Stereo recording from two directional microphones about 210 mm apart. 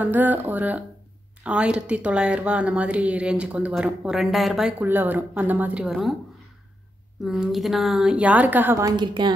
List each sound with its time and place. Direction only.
0.1 s a woman's voice: 10° right (ahead or behind)
7.2 s a woman's voice: centre (ahead or behind); by 9.3 s 20° right (ahead or behind)